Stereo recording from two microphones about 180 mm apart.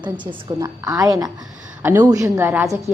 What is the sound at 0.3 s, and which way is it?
A woman's voice, 20° right (ahead or behind).